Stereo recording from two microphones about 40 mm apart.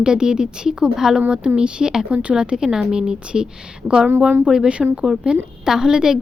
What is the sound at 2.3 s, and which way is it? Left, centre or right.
Speech, centre.